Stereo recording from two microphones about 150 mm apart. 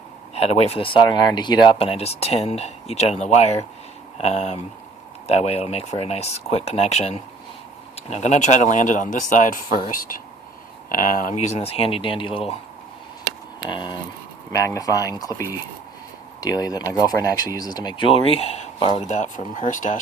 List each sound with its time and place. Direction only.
0.3 s speech: 45° left (ahead or behind); by 9.8 s 60° left (ahead or behind)
10.8 s speech: 65° left (ahead or behind); by 12.5 s 40° left (ahead or behind)
13.7 s speech: 30° left (ahead or behind); by 20.0 s 55° left (ahead or behind)